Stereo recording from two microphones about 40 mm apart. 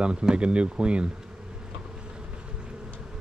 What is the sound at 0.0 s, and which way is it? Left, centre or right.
Speech, right.